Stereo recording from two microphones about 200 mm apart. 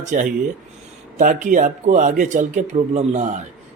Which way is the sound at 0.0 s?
35° right (ahead or behind).